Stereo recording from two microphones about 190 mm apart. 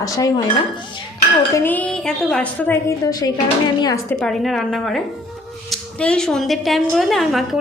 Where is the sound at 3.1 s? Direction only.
20° left (ahead or behind).